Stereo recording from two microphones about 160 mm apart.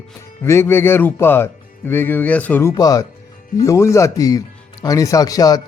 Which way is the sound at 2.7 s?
20° left (ahead or behind).